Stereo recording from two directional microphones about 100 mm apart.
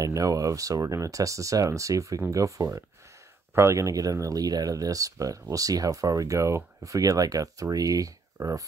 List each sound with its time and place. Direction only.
0.0 s speech: 35° right (ahead or behind)